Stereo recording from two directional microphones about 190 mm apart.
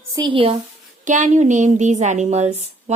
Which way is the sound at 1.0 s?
40° right (ahead or behind).